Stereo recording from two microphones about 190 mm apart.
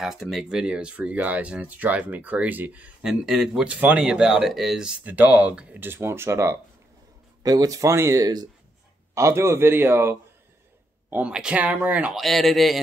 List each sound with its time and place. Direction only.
0.0 s speech: centre (ahead or behind)